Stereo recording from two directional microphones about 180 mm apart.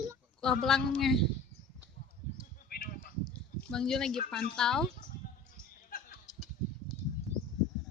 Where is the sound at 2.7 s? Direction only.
55° left (ahead or behind).